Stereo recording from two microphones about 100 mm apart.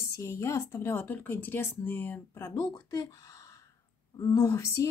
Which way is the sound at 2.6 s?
35° left (ahead or behind).